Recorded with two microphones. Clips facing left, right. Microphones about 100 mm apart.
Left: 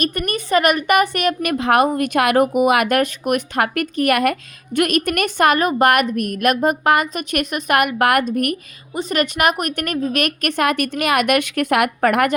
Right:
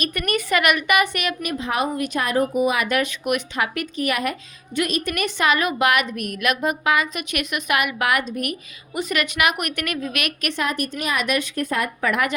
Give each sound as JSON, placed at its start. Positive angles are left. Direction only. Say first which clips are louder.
{"t": 0.0, "sound": "a woman's voice", "louder": "left 2 dB", "side_deg": 35}
{"t": 8.9, "sound": "a woman's voice", "louder": "left 4 dB", "side_deg": 30}
{"t": 11.9, "sound": "a woman's voice", "louder": "left 6 dB", "side_deg": 55}